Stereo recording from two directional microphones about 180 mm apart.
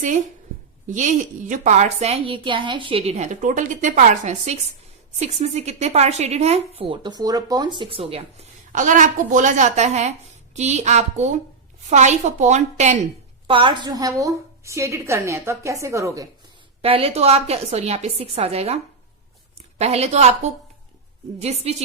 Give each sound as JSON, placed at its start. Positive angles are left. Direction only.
{"t": 0.9, "sound": "a woman's voice", "side_deg": -45}
{"t": 13.5, "sound": "a woman's voice", "side_deg": -25}
{"t": 16.8, "sound": "a woman's voice", "side_deg": -30}
{"t": 19.8, "sound": "a woman's voice", "side_deg": -35}